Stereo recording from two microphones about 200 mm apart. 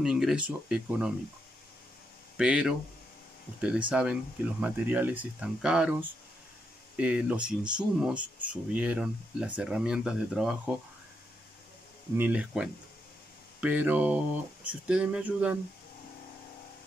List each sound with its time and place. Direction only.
0.0 s speech: centre (ahead or behind)
2.3 s speech: 5° right (ahead or behind)
3.9 s speech: 5° right (ahead or behind)
7.0 s speech: 5° right (ahead or behind)
12.2 s speech: 5° right (ahead or behind)